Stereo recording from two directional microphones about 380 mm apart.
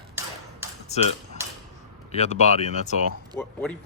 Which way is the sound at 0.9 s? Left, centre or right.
Centre.